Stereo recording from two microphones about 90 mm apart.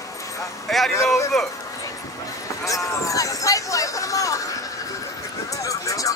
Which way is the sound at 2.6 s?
35° left (ahead or behind).